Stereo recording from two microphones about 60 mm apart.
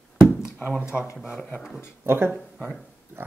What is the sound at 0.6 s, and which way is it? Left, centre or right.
Speech, right.